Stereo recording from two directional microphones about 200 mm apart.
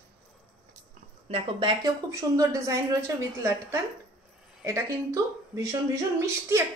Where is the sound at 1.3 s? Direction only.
25° right (ahead or behind).